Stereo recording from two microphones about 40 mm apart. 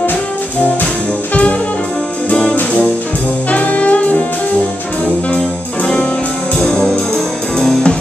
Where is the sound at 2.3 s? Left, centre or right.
Left.